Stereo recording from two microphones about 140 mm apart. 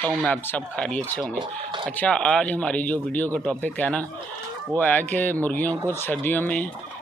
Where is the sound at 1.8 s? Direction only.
10° left (ahead or behind).